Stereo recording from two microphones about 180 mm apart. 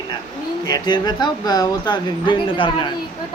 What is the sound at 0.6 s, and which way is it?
Speech, 20° left (ahead or behind).